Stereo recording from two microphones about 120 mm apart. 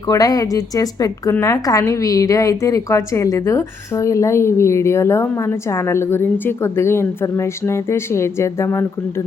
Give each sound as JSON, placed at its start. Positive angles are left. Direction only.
{"t": 0.1, "sound": "a woman's voice", "side_deg": 30}